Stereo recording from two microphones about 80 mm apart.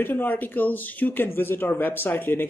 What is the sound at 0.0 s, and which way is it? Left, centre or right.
A man's voice, left.